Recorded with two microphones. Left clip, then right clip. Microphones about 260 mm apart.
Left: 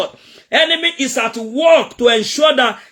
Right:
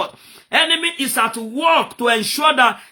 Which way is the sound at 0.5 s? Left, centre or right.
Centre.